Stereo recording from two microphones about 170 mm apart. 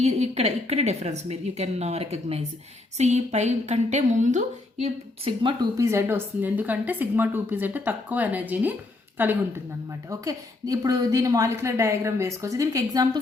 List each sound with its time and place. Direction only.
0.0 s a woman's voice: 40° right (ahead or behind); by 13.1 s 20° right (ahead or behind)